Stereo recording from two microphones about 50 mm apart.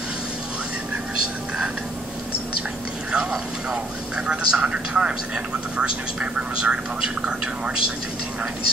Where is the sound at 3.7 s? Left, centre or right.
Centre.